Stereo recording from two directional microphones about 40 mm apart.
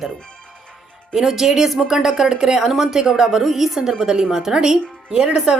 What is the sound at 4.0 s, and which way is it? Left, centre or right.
Speech, centre.